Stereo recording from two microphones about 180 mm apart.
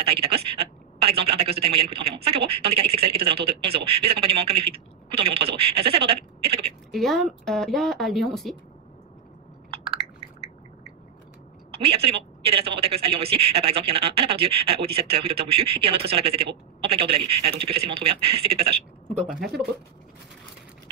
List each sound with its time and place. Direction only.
0.0 s a man's voice: 30° right (ahead or behind)
6.9 s speech: centre (ahead or behind)
11.7 s a man's voice: 30° right (ahead or behind)